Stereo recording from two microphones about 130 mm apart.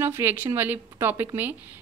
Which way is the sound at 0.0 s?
15° right (ahead or behind).